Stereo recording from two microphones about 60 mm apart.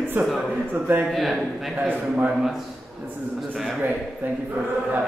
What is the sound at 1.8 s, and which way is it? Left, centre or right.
Speech, right.